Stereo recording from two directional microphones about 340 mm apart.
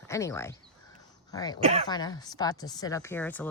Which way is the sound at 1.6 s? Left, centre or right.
Centre.